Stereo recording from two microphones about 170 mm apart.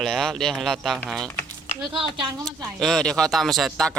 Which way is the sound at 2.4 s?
Centre (ahead or behind).